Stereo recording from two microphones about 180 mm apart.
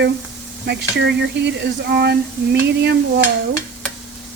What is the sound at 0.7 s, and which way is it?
Speech, 70° right (ahead or behind).